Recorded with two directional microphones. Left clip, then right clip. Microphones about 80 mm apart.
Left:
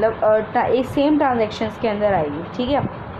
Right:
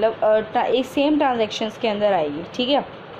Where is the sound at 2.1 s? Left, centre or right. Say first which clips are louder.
Left 1 dB; right.